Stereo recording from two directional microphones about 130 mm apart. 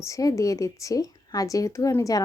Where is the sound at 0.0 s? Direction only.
25° left (ahead or behind).